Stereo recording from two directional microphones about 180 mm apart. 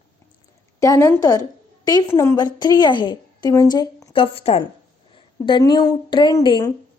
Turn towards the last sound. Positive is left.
turn(degrees=25)  # may be behind; listen again after turning